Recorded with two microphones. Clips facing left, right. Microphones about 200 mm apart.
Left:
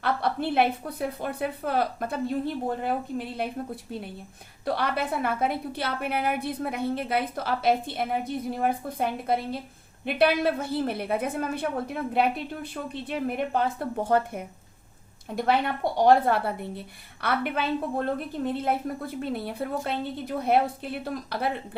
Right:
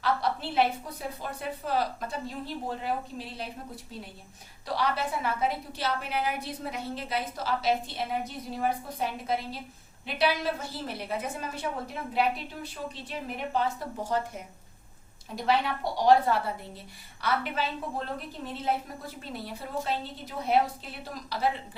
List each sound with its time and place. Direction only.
0.0 s a woman's voice: 55° left (ahead or behind)
4.6 s a woman's voice: 55° left (ahead or behind)